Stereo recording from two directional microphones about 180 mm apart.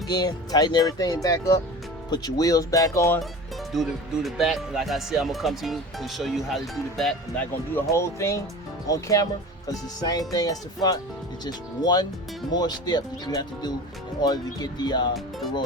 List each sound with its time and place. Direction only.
0.1 s speech: 20° left (ahead or behind)
3.7 s speech: centre (ahead or behind)
7.8 s speech: 15° left (ahead or behind)